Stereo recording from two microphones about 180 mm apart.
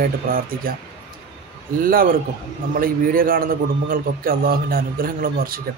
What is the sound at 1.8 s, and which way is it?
A man's voice, 50° right (ahead or behind).